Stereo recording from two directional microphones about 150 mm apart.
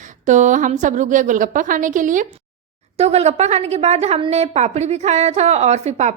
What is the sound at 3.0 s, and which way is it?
A woman's voice, 45° right (ahead or behind).